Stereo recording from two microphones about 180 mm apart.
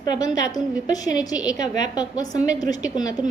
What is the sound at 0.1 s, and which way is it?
A woman's voice, 20° left (ahead or behind).